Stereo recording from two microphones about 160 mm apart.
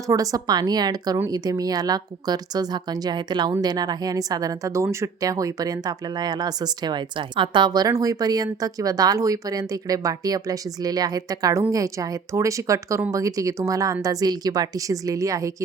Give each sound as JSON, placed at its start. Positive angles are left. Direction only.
{"t": 0.1, "sound": "speech", "side_deg": -20}